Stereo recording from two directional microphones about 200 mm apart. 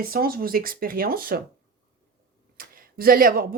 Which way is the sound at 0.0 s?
45° right (ahead or behind).